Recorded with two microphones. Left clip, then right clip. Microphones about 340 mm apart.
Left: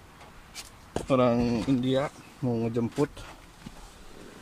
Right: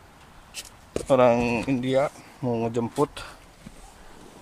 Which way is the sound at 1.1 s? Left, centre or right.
Right.